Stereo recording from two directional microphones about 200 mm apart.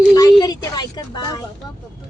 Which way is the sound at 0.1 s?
20° left (ahead or behind).